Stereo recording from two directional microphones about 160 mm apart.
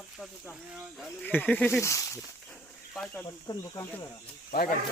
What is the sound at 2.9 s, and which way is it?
Speech, 5° left (ahead or behind).